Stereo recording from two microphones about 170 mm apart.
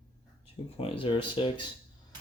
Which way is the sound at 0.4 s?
35° left (ahead or behind).